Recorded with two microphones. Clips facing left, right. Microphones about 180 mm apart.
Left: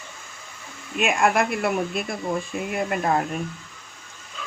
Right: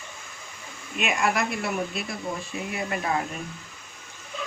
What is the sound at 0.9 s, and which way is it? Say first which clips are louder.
A woman's voice: left 5 dB; 50° left (ahead or behind).